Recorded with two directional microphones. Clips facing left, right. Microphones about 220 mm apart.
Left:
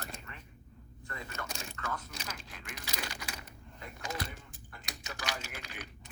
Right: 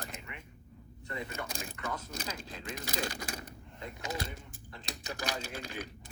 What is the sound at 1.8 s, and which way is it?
Biting, 15° right (ahead or behind).